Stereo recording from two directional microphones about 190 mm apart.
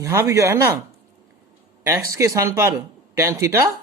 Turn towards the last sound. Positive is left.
turn(degrees=-15)  # may be behind; listen again after turning